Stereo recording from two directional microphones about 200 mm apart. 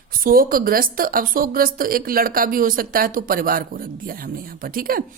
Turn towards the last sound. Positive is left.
turn(degrees=-45)  # may be behind; listen again after turning